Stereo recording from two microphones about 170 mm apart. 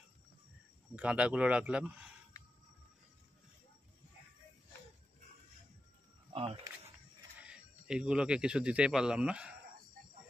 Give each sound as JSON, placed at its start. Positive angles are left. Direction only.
{"t": 0.9, "sound": "speech", "side_deg": -10}
{"t": 6.3, "sound": "speech", "side_deg": -35}
{"t": 7.3, "sound": "speech", "side_deg": -5}